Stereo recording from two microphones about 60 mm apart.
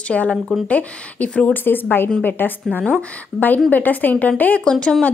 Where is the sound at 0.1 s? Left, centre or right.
Left.